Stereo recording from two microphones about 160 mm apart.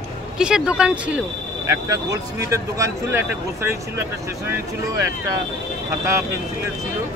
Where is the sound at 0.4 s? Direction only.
5° right (ahead or behind).